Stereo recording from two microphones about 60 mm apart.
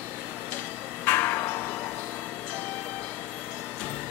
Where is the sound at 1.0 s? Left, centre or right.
Left.